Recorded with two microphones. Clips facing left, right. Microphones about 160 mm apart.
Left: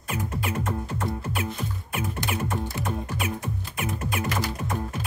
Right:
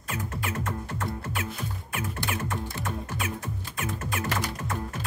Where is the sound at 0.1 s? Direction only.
15° left (ahead or behind).